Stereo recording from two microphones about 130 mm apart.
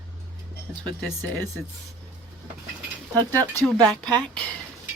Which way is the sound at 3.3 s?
15° left (ahead or behind).